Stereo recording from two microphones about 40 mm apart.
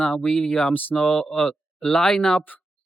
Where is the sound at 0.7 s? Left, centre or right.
Left.